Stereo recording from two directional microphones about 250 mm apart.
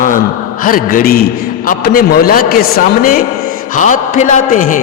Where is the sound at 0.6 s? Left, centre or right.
Left.